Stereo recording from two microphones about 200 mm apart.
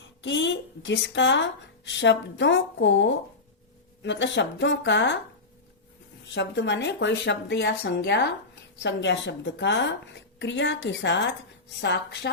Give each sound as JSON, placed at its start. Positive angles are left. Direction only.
{"t": 0.2, "sound": "speech", "side_deg": 65}
{"t": 6.3, "sound": "speech", "side_deg": 60}